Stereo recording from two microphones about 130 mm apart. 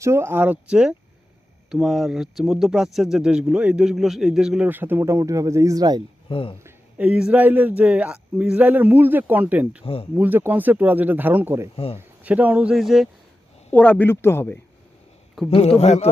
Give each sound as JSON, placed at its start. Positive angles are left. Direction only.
{"t": 0.0, "sound": "a man's voice", "side_deg": -20}
{"t": 6.2, "sound": "speech", "side_deg": 45}
{"t": 6.7, "sound": "a man's voice", "side_deg": -10}
{"t": 9.8, "sound": "speech", "side_deg": 45}
{"t": 10.2, "sound": "a man's voice", "side_deg": -15}
{"t": 13.7, "sound": "speech", "side_deg": 10}
{"t": 15.4, "sound": "speech", "side_deg": 55}